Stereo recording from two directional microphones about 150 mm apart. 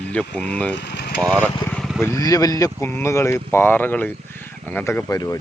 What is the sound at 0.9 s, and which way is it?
Vehicle, 90° left.